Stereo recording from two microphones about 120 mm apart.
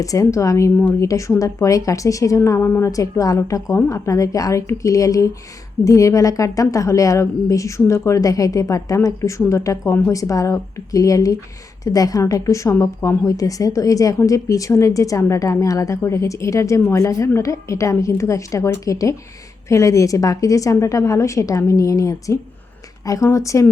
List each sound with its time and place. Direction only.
0.0 s a woman's voice: 30° left (ahead or behind)
1.0 s a woman's voice: 25° left (ahead or behind)